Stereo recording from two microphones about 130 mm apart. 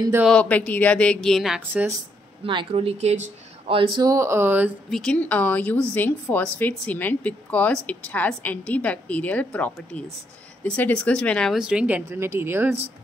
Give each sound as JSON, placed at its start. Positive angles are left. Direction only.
{"t": 0.3, "sound": "a woman's voice", "side_deg": 10}
{"t": 2.4, "sound": "speech", "side_deg": -45}
{"t": 4.0, "sound": "speech", "side_deg": -25}
{"t": 4.9, "sound": "a woman's voice", "side_deg": 5}
{"t": 11.5, "sound": "a woman's voice", "side_deg": -5}